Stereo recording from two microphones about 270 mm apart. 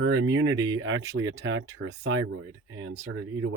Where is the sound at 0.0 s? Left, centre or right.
Right.